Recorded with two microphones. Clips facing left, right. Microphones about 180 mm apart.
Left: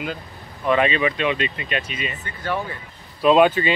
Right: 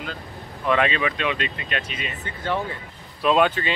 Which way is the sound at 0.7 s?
Centre (ahead or behind).